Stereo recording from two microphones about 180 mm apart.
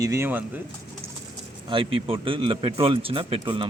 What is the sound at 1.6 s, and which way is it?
A man's voice, 30° right (ahead or behind).